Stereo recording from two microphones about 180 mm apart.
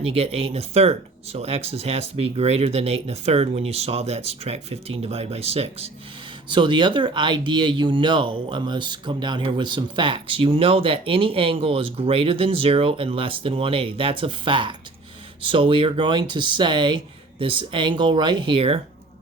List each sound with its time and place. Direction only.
0.0 s speech: 35° right (ahead or behind)